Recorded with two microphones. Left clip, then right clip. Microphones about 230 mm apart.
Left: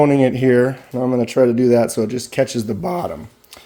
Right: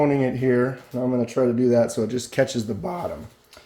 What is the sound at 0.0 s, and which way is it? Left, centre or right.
Speech, left.